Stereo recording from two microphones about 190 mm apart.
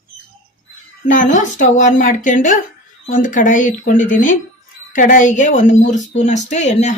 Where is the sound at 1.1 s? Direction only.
40° left (ahead or behind).